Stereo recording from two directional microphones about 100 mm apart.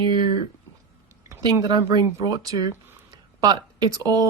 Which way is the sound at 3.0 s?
45° right (ahead or behind).